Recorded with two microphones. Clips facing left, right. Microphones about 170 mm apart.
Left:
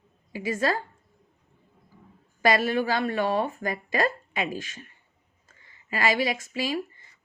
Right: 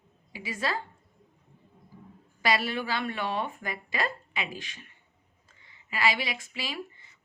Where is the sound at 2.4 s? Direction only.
50° left (ahead or behind).